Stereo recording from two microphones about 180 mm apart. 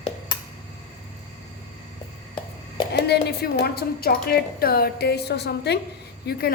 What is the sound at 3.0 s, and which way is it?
A woman's voice, 65° left (ahead or behind).